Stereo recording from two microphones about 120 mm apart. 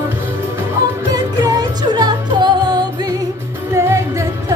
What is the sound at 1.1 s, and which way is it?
Music, 30° right (ahead or behind).